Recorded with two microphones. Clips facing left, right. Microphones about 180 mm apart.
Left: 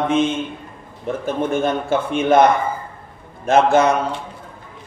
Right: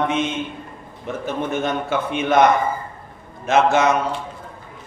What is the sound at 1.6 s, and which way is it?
Speech, 30° left (ahead or behind).